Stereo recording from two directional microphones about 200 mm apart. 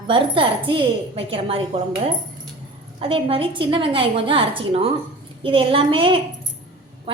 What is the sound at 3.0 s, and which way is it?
A woman's voice, 25° right (ahead or behind).